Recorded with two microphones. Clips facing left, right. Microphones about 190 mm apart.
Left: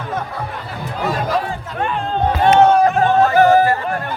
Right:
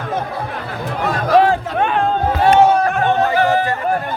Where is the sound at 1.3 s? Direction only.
80° right.